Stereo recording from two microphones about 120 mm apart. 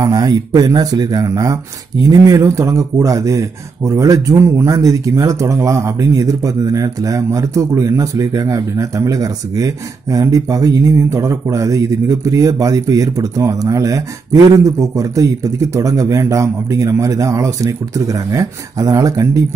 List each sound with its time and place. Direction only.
0.0 s speech: 30° right (ahead or behind)